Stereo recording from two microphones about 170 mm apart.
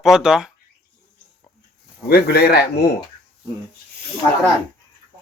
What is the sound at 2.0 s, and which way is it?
Speech, 65° left (ahead or behind).